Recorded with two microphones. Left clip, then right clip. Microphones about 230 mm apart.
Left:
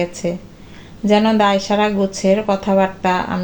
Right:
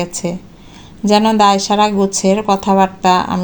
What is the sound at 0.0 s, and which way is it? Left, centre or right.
Speech, right.